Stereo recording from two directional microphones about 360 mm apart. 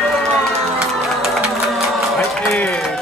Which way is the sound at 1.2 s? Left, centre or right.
Centre.